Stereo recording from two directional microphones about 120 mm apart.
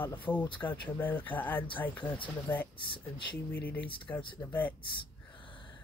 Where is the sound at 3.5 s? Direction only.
15° left (ahead or behind).